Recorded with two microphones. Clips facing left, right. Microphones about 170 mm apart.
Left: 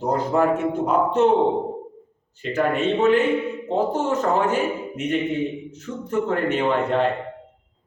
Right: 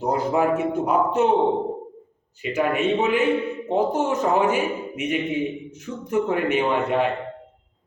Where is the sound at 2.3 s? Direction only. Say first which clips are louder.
Left 1 dB; 10° right (ahead or behind).